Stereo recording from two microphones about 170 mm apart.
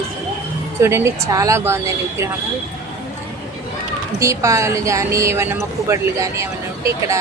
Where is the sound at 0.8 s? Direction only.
15° right (ahead or behind).